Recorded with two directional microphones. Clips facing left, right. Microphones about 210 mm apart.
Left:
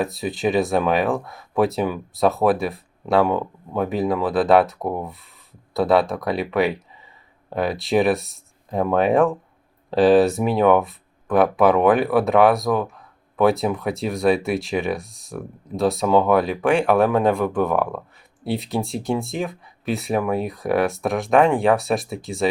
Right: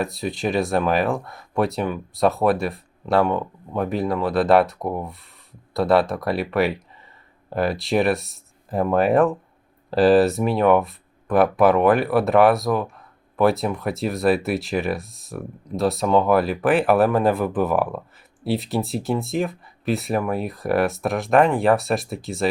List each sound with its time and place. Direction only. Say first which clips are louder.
0.0 s speech: left 2 dB; centre (ahead or behind)